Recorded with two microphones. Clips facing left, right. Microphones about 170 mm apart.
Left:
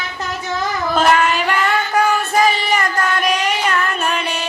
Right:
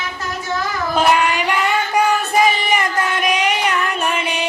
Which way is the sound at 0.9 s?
15° right (ahead or behind).